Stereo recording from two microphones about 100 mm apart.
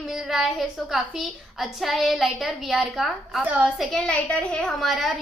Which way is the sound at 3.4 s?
15° right (ahead or behind).